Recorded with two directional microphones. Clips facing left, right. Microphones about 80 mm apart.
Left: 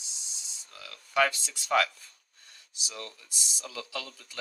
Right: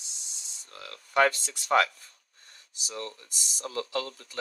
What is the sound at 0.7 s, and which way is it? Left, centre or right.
Speech, right.